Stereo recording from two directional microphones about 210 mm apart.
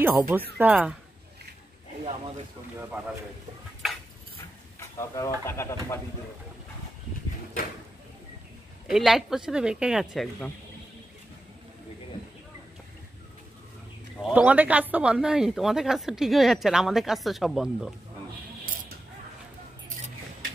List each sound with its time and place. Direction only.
0.0 s speech: 10° right (ahead or behind)
2.0 s speech: 30° right (ahead or behind)
3.8 s a sound: centre (ahead or behind)
4.7 s a sound: 15° left (ahead or behind)
5.4 s speech: 10° left (ahead or behind)
8.8 s speech: centre (ahead or behind)
14.2 s speech: 5° right (ahead or behind)